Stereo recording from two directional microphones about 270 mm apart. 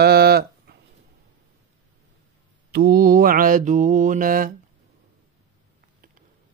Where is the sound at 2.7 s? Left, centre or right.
Right.